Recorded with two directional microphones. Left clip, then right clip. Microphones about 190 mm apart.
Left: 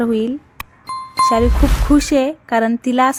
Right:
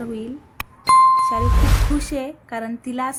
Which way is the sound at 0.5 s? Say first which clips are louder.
Right 13 dB; centre (ahead or behind).